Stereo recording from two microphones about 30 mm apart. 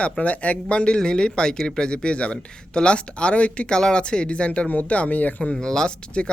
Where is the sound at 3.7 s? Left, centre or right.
Left.